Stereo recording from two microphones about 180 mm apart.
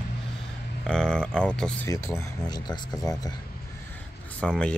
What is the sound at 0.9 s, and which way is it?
Speech, 5° left (ahead or behind).